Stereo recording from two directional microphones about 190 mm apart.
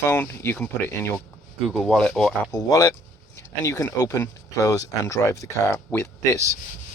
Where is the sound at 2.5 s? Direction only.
20° left (ahead or behind).